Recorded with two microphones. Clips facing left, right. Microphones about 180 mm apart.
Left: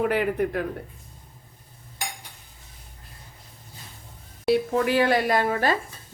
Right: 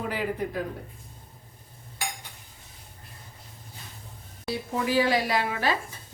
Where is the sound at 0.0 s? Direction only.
65° left (ahead or behind).